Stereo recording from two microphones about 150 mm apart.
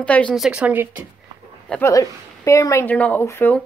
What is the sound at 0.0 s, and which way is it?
Speech, 5° left (ahead or behind).